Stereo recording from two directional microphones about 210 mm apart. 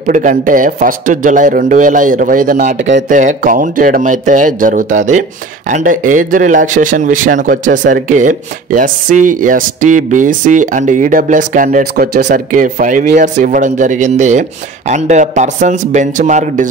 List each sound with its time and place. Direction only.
0.0 s speech: 40° right (ahead or behind)
12.2 s speech: 55° right (ahead or behind)
12.6 s speech: 40° right (ahead or behind)